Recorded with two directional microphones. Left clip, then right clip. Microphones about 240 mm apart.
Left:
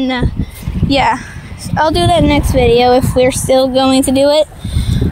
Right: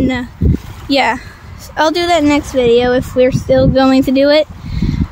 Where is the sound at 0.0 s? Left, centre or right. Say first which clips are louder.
Even; centre.